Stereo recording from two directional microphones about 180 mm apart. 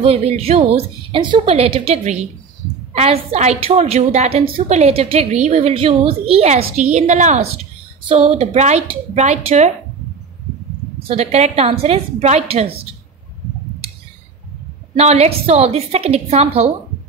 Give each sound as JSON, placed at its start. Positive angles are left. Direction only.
{"t": 0.0, "sound": "a woman's voice", "side_deg": -35}
{"t": 11.1, "sound": "a woman's voice", "side_deg": -35}
{"t": 15.0, "sound": "a woman's voice", "side_deg": -35}